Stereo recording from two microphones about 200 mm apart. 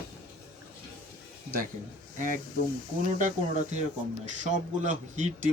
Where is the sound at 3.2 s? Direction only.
40° right (ahead or behind).